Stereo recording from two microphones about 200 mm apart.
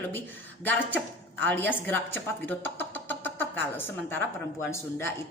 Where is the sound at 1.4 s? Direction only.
10° left (ahead or behind).